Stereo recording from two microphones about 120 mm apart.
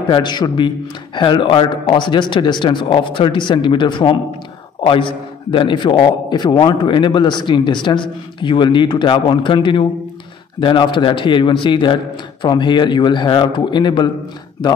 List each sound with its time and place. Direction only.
0.1 s a man's voice: 40° left (ahead or behind)